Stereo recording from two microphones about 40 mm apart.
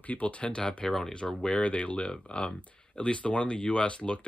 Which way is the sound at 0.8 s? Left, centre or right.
Centre.